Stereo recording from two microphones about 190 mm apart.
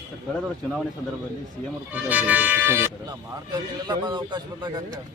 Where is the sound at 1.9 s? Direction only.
10° right (ahead or behind).